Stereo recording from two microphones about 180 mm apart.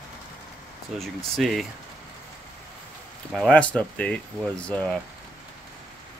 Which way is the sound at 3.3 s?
5° left (ahead or behind).